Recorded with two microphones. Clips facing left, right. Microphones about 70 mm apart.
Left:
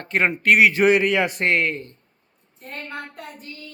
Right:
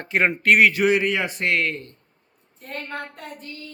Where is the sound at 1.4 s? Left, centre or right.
Left.